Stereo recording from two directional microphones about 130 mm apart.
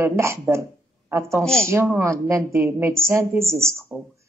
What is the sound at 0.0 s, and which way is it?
Speech, 20° right (ahead or behind).